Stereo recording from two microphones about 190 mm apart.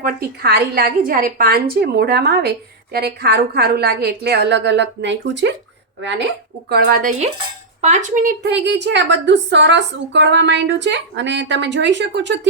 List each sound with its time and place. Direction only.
0.0 s a woman's voice: 55° right (ahead or behind)
6.7 s a woman's voice: 55° right (ahead or behind)
8.4 s a woman's voice: 65° right (ahead or behind)